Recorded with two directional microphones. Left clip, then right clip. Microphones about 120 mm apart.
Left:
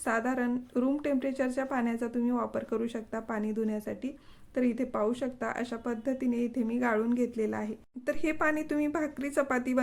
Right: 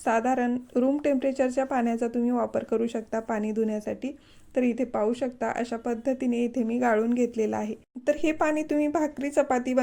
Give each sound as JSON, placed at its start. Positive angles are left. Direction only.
{"t": 0.0, "sound": "speech", "side_deg": -30}